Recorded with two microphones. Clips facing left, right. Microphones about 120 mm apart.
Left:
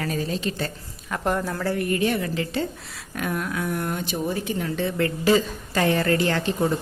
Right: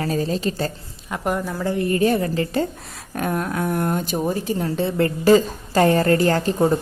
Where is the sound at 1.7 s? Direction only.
30° right (ahead or behind).